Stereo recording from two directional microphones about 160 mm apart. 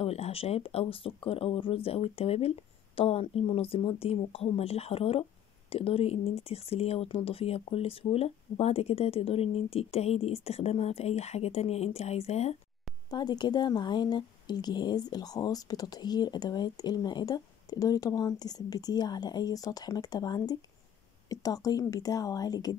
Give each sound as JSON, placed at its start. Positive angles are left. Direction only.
{"t": 0.0, "sound": "speech", "side_deg": 40}
{"t": 13.1, "sound": "a woman's voice", "side_deg": 25}